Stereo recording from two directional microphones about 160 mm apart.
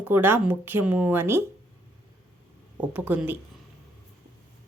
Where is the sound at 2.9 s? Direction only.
10° right (ahead or behind).